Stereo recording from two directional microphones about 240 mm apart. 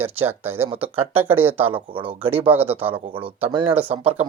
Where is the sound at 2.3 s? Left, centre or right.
Centre.